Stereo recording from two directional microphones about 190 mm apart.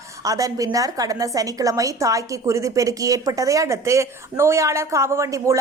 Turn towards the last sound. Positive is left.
turn(degrees=-15)  # may be behind; listen again after turning